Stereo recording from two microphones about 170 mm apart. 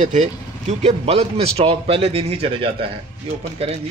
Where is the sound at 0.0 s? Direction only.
45° right (ahead or behind).